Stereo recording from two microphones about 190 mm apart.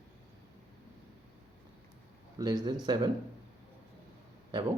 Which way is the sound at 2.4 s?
20° right (ahead or behind).